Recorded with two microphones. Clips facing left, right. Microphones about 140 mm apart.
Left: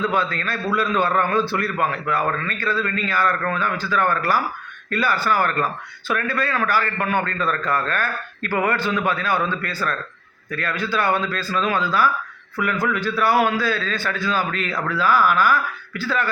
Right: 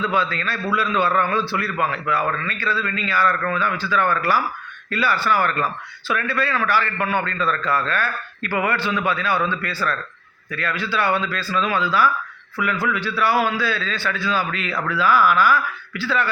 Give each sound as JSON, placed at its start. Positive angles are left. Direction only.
{"t": 0.1, "sound": "a man's voice", "side_deg": 45}